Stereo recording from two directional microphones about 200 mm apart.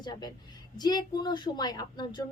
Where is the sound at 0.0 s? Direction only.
20° left (ahead or behind).